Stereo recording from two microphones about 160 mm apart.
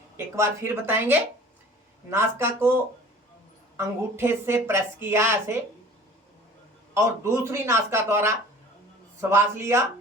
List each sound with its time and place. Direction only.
0.3 s a woman's voice: 15° right (ahead or behind)
6.9 s a woman's voice: 15° right (ahead or behind)